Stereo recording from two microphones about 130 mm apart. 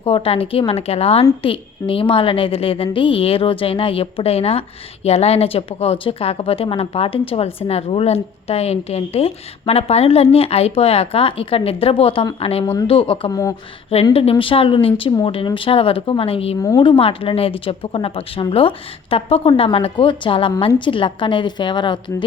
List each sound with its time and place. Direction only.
0.0 s a woman's voice: 45° left (ahead or behind)
13.3 s speech: 25° left (ahead or behind)
13.9 s a woman's voice: 50° left (ahead or behind)
16.6 s speech: 30° left (ahead or behind)
16.8 s a woman's voice: 45° left (ahead or behind)